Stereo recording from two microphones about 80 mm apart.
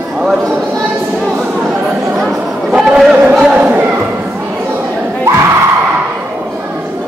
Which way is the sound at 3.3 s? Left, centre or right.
Centre.